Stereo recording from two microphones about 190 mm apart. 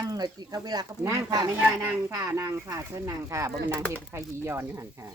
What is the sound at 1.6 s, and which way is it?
Speech, 10° right (ahead or behind).